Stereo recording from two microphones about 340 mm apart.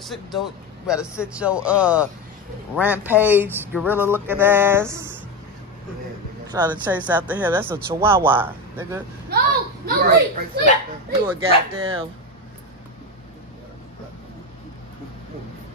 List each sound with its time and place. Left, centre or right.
0.0 s speech: centre
6.5 s speech: centre
9.3 s a child's voice: right
11.2 s speech: centre